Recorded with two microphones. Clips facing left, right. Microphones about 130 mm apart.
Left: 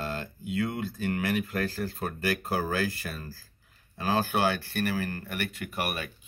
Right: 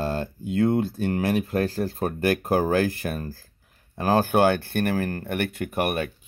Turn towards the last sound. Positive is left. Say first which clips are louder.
# right 8 dB
turn(degrees=-50)  # may be behind; listen again after turning